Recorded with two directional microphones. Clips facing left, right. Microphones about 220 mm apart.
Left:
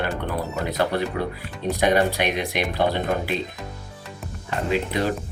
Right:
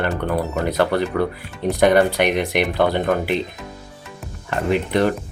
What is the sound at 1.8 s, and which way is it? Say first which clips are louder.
Speech: right 5 dB; 55° right (ahead or behind).